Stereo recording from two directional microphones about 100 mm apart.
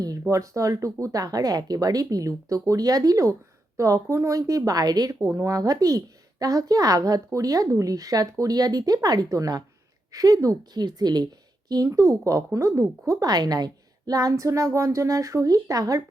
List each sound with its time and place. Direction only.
0.0 s speech: 35° right (ahead or behind)
5.2 s speech: 30° right (ahead or behind)